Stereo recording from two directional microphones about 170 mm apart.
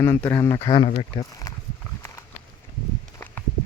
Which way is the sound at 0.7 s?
35° left (ahead or behind).